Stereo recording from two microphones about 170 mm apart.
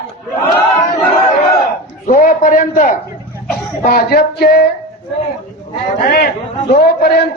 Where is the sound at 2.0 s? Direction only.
50° left (ahead or behind).